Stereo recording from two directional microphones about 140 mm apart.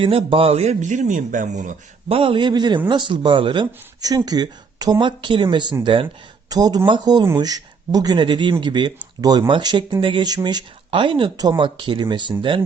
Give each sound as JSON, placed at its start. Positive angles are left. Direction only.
{"t": 0.0, "sound": "speech", "side_deg": -40}
{"t": 2.0, "sound": "speech", "side_deg": -40}
{"t": 6.5, "sound": "speech", "side_deg": -25}